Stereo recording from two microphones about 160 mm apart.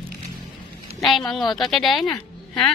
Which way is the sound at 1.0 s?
Centre (ahead or behind).